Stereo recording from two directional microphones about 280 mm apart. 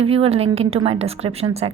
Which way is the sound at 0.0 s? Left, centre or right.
Right.